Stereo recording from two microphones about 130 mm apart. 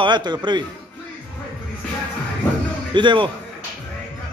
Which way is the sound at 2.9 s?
40° right (ahead or behind).